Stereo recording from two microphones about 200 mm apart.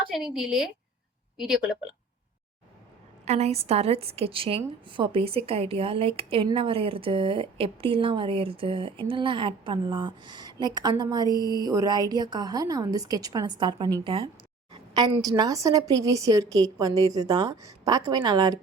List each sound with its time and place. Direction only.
0.3 s speech: 5° right (ahead or behind)
3.2 s a woman's voice: 35° right (ahead or behind)